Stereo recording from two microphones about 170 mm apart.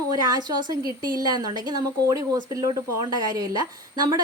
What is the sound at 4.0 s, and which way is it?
Speech, 25° right (ahead or behind).